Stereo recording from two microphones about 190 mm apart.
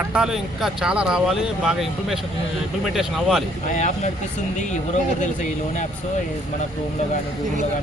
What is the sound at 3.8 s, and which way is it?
Speech, 40° left (ahead or behind).